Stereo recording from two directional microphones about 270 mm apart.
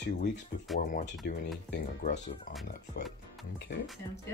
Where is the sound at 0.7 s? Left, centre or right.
Left.